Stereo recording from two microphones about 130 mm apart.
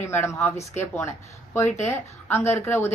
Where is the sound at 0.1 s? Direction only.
20° left (ahead or behind).